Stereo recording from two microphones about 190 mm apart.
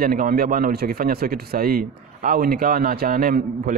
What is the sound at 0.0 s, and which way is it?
Speech, 50° right (ahead or behind).